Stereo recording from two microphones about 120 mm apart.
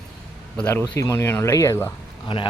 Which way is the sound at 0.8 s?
25° left (ahead or behind).